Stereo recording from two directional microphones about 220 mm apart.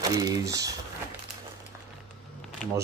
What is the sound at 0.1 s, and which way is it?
Speech, 15° right (ahead or behind).